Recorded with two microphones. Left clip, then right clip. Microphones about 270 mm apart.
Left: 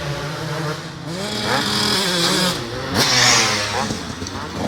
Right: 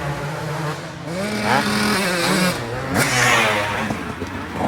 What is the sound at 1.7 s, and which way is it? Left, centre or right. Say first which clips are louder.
Vehicle: left 1 dB; centre.